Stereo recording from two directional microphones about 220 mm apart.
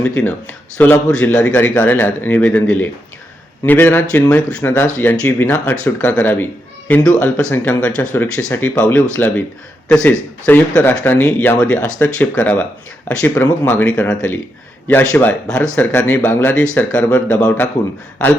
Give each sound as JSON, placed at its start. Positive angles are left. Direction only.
{"t": 0.0, "sound": "a man's voice", "side_deg": 5}